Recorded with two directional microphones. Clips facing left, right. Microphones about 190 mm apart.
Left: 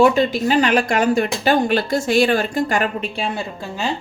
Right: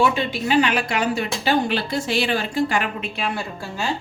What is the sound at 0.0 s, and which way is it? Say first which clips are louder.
Speech: left 6 dB; 40° left (ahead or behind).